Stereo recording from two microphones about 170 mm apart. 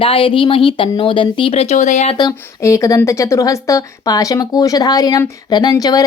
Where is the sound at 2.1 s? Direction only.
20° left (ahead or behind).